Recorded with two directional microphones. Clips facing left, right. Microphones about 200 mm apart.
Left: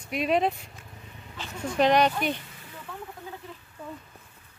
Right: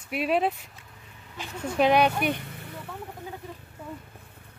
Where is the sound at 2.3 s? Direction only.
60° right (ahead or behind).